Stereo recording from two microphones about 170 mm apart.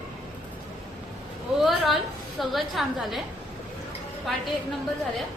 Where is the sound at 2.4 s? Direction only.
Centre (ahead or behind).